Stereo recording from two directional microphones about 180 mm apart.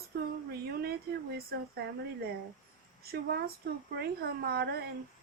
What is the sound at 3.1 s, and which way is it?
Speech, 55° right (ahead or behind).